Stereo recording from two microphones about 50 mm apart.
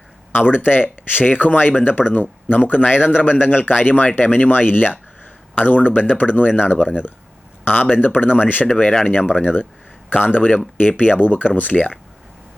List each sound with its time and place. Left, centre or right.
0.3 s speech: left